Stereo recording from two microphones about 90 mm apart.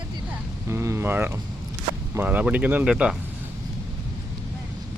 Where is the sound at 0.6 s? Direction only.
30° right (ahead or behind); by 3.1 s 10° right (ahead or behind).